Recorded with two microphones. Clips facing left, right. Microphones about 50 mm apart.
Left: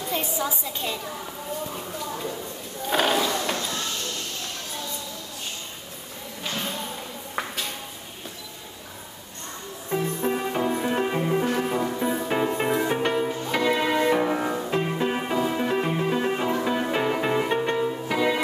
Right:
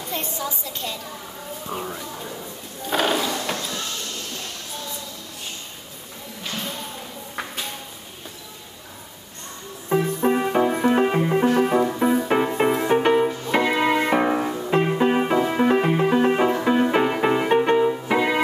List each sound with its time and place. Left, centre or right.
0.1 s a woman's voice: centre
1.7 s speech: right
2.9 s a sound: centre
9.8 s music: right